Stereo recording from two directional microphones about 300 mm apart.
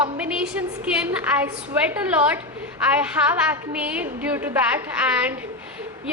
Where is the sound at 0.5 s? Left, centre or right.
Centre.